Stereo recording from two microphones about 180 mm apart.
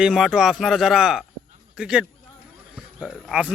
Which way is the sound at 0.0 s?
Centre (ahead or behind).